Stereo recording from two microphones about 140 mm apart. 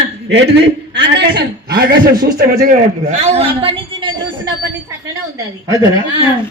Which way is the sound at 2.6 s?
60° right (ahead or behind).